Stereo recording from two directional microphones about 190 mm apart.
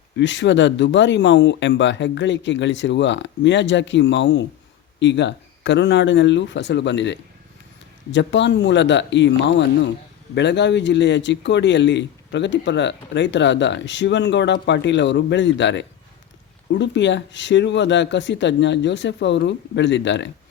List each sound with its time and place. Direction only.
0.2 s speech: 70° left (ahead or behind)